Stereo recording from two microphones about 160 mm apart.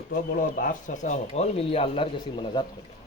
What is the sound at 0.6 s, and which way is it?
Speech, 55° left (ahead or behind).